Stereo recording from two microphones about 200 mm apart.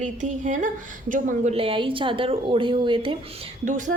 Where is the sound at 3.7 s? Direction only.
40° right (ahead or behind).